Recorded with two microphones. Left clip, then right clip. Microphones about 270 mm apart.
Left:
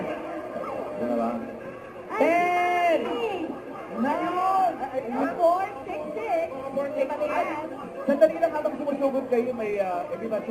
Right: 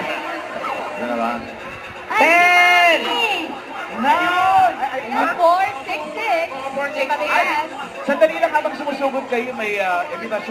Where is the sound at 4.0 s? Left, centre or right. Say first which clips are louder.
Right 10 dB; centre.